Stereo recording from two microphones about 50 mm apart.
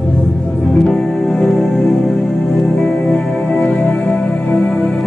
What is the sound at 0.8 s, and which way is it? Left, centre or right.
Music, centre.